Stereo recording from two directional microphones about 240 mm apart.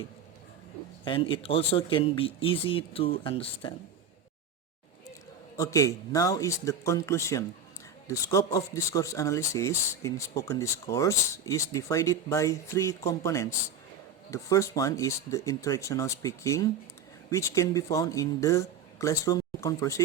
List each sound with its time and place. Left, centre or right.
1.0 s speech: left
5.5 s speech: centre